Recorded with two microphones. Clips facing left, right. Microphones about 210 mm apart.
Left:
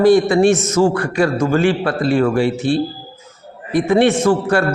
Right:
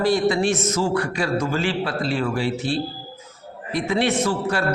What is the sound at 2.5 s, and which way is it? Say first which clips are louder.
A man's voice: left 7 dB; 50° left (ahead or behind).